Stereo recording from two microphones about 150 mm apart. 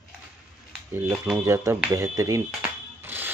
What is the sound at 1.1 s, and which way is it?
Speech, 5° right (ahead or behind).